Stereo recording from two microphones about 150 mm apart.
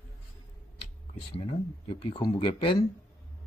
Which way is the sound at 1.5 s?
40° left (ahead or behind).